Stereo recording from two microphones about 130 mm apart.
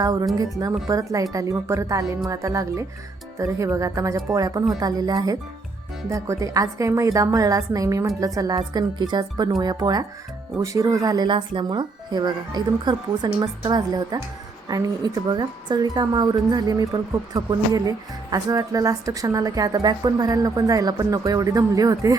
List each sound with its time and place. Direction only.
0.0 s a woman's voice: 30° right (ahead or behind)